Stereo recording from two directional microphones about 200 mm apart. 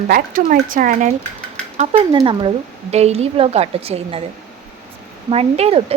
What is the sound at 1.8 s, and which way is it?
Speech, 30° right (ahead or behind).